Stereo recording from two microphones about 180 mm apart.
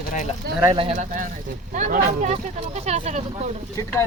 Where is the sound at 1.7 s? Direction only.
40° right (ahead or behind).